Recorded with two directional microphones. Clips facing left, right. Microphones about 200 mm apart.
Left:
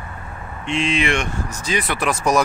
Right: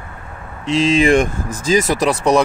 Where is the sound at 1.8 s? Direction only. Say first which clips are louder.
Right 5 dB; 35° right (ahead or behind).